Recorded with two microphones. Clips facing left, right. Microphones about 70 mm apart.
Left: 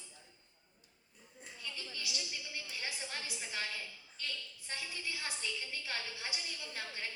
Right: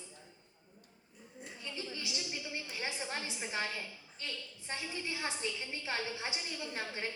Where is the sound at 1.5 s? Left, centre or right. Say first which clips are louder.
Right 3 dB; right.